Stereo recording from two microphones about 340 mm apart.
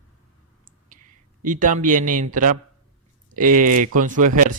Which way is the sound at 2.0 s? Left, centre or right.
Right.